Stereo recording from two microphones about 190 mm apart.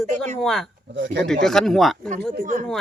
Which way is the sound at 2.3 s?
40° right (ahead or behind).